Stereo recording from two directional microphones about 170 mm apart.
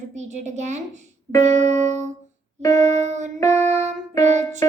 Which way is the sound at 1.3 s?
45° right (ahead or behind).